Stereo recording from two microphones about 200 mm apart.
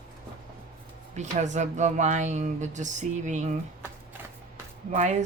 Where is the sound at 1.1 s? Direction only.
35° right (ahead or behind).